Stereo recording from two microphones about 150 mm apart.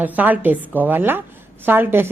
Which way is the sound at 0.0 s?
10° right (ahead or behind).